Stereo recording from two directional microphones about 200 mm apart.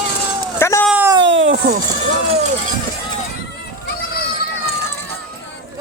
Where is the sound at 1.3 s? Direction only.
70° right (ahead or behind).